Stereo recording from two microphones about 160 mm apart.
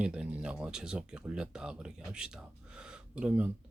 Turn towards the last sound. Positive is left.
turn(degrees=-5)  # may be behind; listen again after turning